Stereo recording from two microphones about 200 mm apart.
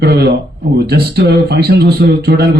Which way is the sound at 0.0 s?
55° right (ahead or behind).